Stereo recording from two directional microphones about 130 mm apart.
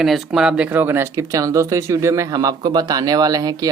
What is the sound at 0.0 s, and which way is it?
Speech, 5° right (ahead or behind).